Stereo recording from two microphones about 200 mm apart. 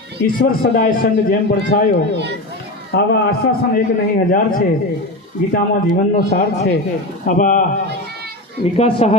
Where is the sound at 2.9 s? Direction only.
55° left (ahead or behind).